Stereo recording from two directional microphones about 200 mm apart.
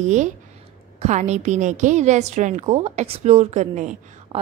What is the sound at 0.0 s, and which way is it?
A woman's voice, 35° right (ahead or behind).